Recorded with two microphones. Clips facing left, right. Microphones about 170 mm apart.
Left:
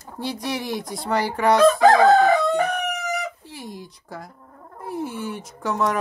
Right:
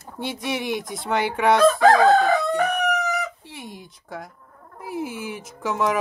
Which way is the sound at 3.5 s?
Centre (ahead or behind).